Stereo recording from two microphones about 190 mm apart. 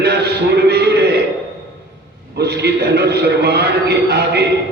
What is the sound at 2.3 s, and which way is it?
A man's voice, 60° right (ahead or behind).